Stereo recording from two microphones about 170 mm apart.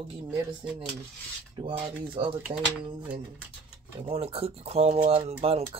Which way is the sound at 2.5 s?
30° right (ahead or behind).